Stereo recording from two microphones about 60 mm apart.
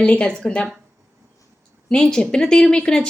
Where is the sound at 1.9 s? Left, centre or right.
Centre.